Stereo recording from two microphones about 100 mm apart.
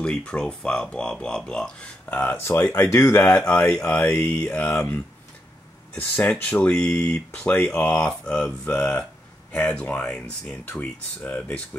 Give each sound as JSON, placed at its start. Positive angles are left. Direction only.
{"t": 0.0, "sound": "speech", "side_deg": 10}
{"t": 3.2, "sound": "speech", "side_deg": 10}